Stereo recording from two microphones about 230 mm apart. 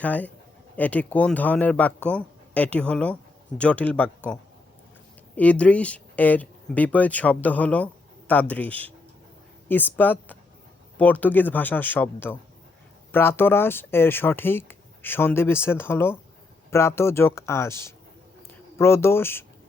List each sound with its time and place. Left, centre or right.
0.0 s speech: centre
5.4 s speech: centre